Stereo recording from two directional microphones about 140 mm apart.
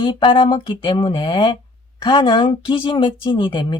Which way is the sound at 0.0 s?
35° left (ahead or behind).